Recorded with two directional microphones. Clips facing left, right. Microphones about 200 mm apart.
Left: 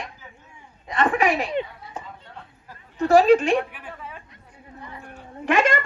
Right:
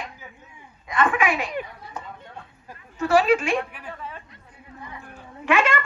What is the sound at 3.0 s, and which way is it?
Speech, 35° left (ahead or behind).